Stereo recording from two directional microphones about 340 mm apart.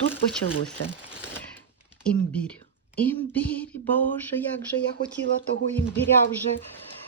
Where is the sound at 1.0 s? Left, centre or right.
Centre.